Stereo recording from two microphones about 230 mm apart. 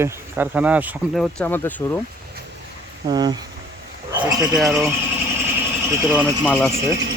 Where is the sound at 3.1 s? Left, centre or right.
Centre.